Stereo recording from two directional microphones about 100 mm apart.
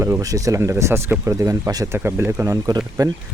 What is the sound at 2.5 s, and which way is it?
Speech, 40° right (ahead or behind).